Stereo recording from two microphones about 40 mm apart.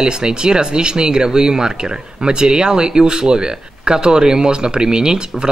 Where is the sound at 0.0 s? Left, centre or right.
Centre.